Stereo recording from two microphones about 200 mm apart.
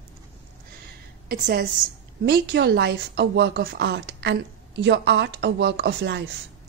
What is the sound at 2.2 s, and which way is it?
A woman's voice, 55° right (ahead or behind).